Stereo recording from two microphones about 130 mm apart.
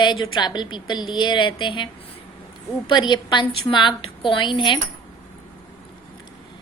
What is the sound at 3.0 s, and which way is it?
A woman's voice, 35° left (ahead or behind).